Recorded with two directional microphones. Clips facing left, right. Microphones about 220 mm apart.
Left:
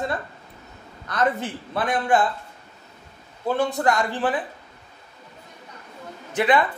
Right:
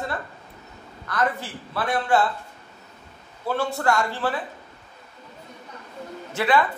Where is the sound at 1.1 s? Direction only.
20° left (ahead or behind).